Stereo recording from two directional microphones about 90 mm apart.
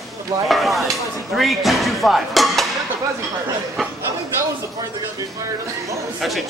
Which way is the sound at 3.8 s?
5° left (ahead or behind).